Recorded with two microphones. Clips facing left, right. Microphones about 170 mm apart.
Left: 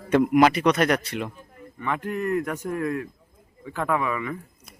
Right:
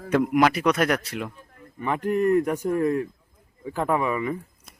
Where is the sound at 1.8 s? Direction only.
35° right (ahead or behind).